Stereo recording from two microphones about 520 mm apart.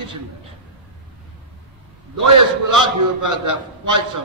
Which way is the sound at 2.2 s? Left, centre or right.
Right.